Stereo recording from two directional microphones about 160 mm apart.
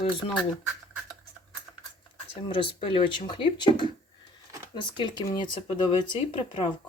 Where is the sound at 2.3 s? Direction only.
35° left (ahead or behind).